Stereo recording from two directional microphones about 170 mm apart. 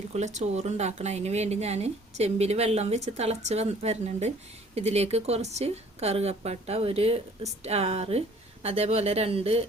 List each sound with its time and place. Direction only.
0.1 s speech: 40° right (ahead or behind)